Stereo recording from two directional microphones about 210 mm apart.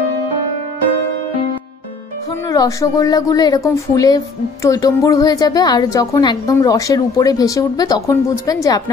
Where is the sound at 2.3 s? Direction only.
15° left (ahead or behind).